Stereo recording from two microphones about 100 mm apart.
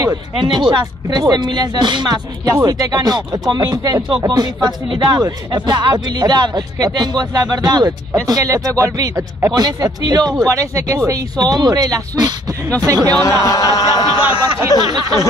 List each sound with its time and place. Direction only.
0.0 s speech: 45° right (ahead or behind)
13.2 s a sound: 30° left (ahead or behind)
14.8 s speech: 40° right (ahead or behind)